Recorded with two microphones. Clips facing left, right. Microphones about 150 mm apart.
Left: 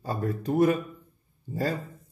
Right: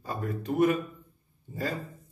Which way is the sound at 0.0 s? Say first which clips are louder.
Left 4 dB; 35° left (ahead or behind).